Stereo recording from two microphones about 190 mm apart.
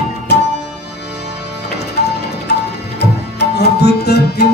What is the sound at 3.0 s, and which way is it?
Tabla, 60° left (ahead or behind).